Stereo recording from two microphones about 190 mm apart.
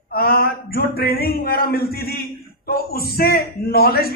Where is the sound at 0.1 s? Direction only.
55° left (ahead or behind).